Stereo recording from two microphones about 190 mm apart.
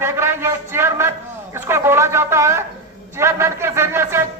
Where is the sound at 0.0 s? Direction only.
10° right (ahead or behind).